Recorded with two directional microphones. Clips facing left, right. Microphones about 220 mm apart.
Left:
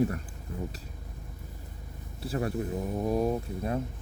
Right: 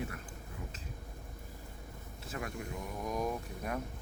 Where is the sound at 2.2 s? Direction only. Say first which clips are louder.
Left 10 dB; 35° left (ahead or behind).